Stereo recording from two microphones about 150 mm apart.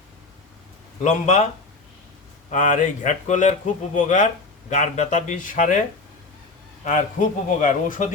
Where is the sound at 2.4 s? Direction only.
60° left (ahead or behind).